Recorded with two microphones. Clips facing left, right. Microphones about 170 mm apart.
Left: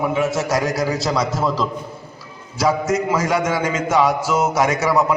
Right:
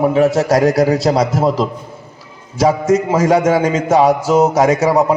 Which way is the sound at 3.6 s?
30° right (ahead or behind).